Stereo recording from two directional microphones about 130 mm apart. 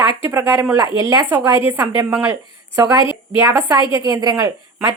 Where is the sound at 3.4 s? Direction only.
20° right (ahead or behind).